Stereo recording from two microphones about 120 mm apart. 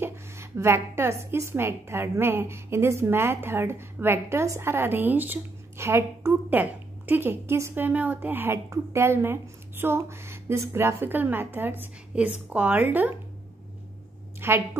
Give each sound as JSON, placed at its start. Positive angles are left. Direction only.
{"t": 0.0, "sound": "a woman's voice", "side_deg": -20}
{"t": 14.4, "sound": "a woman's voice", "side_deg": -20}